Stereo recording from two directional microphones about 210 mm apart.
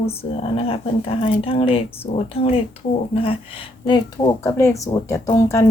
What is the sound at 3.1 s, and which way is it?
A woman's voice, 25° left (ahead or behind).